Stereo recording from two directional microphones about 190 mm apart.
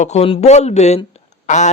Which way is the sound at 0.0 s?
35° left (ahead or behind).